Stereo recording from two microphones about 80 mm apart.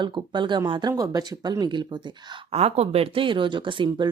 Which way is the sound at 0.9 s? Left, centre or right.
Right.